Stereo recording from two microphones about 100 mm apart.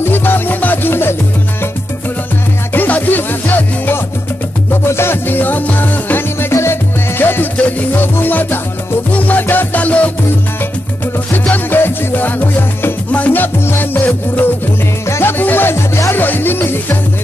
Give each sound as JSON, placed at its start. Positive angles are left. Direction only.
{"t": 0.0, "sound": "music", "side_deg": 20}
{"t": 2.7, "sound": "music", "side_deg": 20}
{"t": 11.3, "sound": "music", "side_deg": 15}